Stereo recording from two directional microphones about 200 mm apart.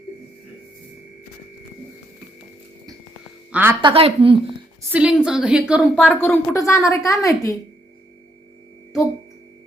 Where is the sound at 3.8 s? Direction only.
30° right (ahead or behind).